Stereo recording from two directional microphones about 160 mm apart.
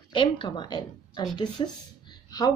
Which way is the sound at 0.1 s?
30° left (ahead or behind).